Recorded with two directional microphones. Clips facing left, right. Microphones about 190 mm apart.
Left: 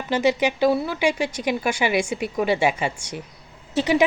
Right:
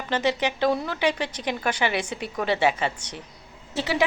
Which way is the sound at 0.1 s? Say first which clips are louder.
Left 4 dB; 10° left (ahead or behind).